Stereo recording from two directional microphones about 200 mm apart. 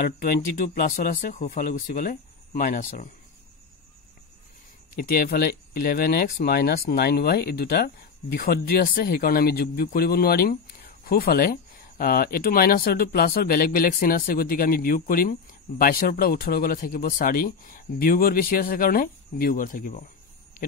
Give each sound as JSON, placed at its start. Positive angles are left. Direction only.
{"t": 0.8, "sound": "speech", "side_deg": 45}
{"t": 4.9, "sound": "speech", "side_deg": 50}